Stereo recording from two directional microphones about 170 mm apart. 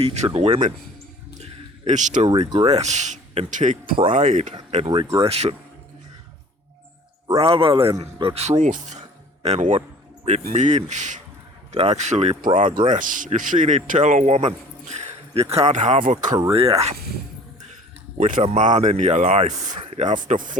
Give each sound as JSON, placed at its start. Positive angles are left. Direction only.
{"t": 0.0, "sound": "speech", "side_deg": -40}
{"t": 1.8, "sound": "speech", "side_deg": -45}
{"t": 2.3, "sound": "speech", "side_deg": -25}
{"t": 2.8, "sound": "speech", "side_deg": -45}
{"t": 7.3, "sound": "speech", "side_deg": -30}
{"t": 12.9, "sound": "speech", "side_deg": -50}
{"t": 18.2, "sound": "speech", "side_deg": -50}